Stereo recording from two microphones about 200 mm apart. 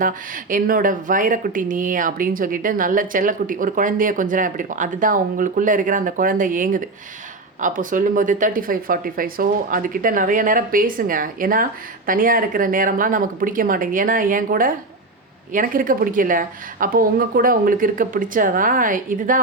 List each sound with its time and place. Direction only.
0.5 s speech: 45° right (ahead or behind)